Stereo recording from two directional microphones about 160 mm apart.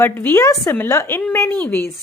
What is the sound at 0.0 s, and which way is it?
A woman's voice, 15° left (ahead or behind).